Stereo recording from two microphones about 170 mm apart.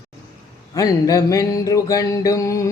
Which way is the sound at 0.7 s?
20° left (ahead or behind).